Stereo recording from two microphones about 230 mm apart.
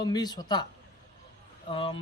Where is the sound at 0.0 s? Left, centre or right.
Centre.